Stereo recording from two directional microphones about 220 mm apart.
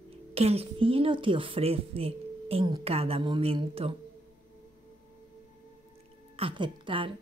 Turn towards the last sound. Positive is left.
turn(degrees=-20)  # may be behind; listen again after turning